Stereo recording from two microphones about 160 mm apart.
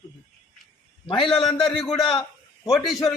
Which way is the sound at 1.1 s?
35° left (ahead or behind).